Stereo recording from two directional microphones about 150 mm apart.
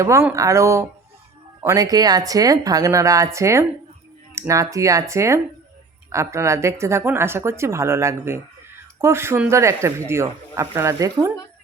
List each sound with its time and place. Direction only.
0.0 s speech: 20° right (ahead or behind)